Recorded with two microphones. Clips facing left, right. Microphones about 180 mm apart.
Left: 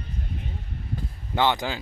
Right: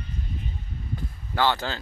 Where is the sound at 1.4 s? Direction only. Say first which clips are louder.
Left 1 dB; 15° left (ahead or behind).